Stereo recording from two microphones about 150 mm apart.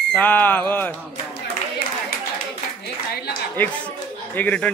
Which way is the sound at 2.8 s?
90° left.